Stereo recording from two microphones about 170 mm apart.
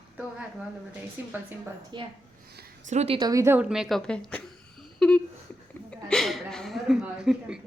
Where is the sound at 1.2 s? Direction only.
10° right (ahead or behind).